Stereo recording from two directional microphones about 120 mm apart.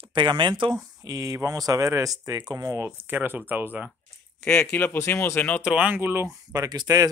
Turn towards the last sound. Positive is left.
turn(degrees=-30)  # may be behind; listen again after turning